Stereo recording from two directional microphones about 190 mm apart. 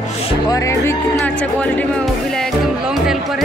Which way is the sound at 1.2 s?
5° left (ahead or behind).